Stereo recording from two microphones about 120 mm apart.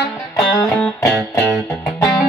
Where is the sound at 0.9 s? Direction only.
25° left (ahead or behind).